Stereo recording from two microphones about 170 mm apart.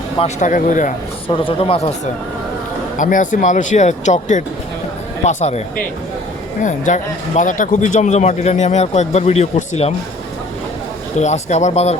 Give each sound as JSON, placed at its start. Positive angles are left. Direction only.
{"t": 0.2, "sound": "speech", "side_deg": 45}
{"t": 1.3, "sound": "speech", "side_deg": 30}
{"t": 3.0, "sound": "speech", "side_deg": 50}
{"t": 11.2, "sound": "speech", "side_deg": 40}